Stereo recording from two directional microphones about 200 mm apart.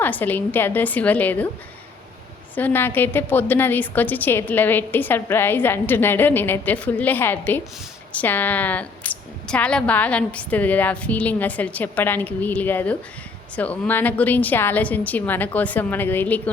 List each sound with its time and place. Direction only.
0.0 s a woman's voice: 10° left (ahead or behind)
2.6 s a woman's voice: 10° left (ahead or behind)